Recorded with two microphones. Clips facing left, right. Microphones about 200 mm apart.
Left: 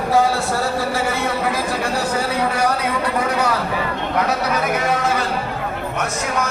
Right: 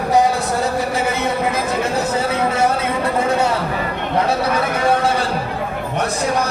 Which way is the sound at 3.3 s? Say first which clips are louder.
Right 3 dB; 25° right (ahead or behind).